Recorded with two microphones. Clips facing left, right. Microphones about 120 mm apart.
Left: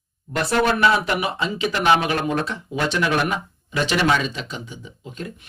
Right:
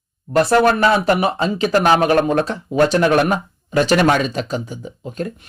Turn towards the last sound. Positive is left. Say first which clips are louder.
# right 8 dB
turn(degrees=-45)  # may be behind; listen again after turning